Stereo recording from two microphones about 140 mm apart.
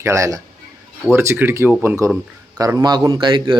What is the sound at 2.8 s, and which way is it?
Speech, 30° right (ahead or behind).